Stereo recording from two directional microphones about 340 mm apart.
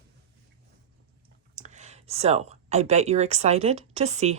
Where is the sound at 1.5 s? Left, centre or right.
Right.